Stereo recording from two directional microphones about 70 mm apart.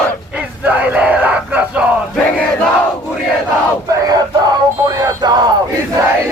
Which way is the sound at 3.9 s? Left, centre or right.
Right.